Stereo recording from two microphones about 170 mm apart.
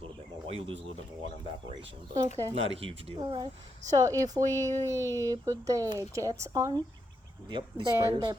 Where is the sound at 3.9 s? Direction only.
20° right (ahead or behind).